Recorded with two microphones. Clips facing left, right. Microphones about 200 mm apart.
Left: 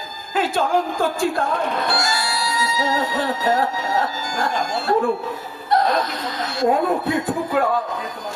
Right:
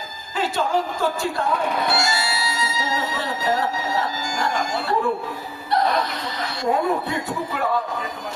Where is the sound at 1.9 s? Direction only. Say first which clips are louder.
Even; 25° right (ahead or behind).